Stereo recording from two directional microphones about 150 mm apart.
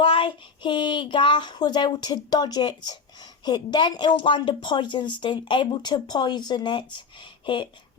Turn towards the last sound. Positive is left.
turn(degrees=35)  # may be behind; listen again after turning